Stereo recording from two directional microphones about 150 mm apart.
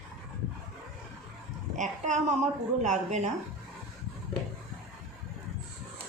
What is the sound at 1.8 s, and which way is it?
Speech, 55° right (ahead or behind).